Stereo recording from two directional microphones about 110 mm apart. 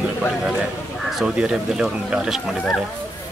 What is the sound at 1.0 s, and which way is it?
Speech, 5° right (ahead or behind).